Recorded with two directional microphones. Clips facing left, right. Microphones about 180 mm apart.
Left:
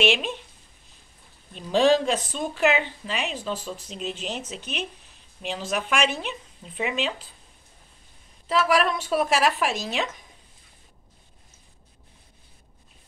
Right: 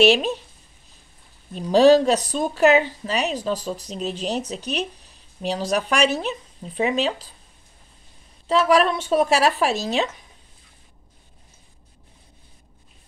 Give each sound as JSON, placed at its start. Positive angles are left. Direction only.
{"t": 0.0, "sound": "speech", "side_deg": -40}
{"t": 1.5, "sound": "speech", "side_deg": -40}
{"t": 8.5, "sound": "speech", "side_deg": -30}